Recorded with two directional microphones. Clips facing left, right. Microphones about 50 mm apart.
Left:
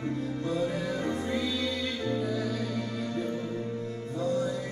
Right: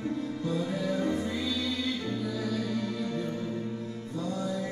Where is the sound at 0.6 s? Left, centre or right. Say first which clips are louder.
Right 1 dB; left.